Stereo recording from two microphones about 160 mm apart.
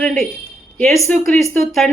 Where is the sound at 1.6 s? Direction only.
Centre (ahead or behind).